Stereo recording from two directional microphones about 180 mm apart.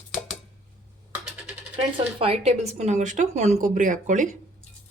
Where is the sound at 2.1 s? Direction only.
30° right (ahead or behind).